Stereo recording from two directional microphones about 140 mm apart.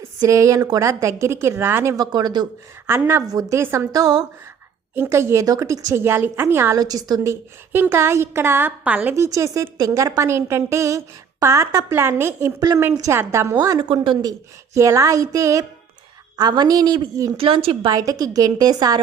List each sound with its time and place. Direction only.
0.2 s a woman's voice: 20° right (ahead or behind)
2.8 s a woman's voice: 20° right (ahead or behind)
4.9 s a woman's voice: 15° right (ahead or behind)
6.7 s a woman's voice: 25° right (ahead or behind)
7.7 s a woman's voice: 15° right (ahead or behind)
13.6 s a woman's voice: 30° right (ahead or behind)
17.3 s a woman's voice: 40° right (ahead or behind)
17.9 s a woman's voice: 25° right (ahead or behind)